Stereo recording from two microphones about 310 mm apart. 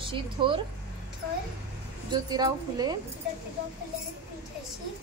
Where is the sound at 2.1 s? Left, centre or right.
Centre.